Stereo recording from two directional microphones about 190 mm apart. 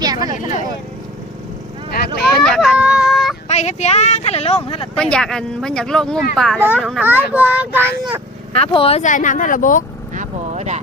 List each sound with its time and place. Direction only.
0.0 s vehicle: 20° right (ahead or behind)
2.3 s a sound: 5° left (ahead or behind)
3.5 s speech: 35° left (ahead or behind)
4.9 s speech: 5° left (ahead or behind)
7.0 s a child's voice: 10° right (ahead or behind)
8.5 s speech: 30° left (ahead or behind)
10.2 s vehicle: 35° right (ahead or behind)